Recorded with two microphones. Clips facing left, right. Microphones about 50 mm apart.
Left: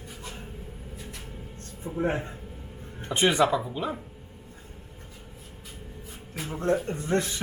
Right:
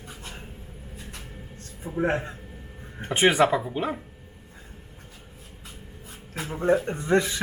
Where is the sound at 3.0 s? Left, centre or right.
Right.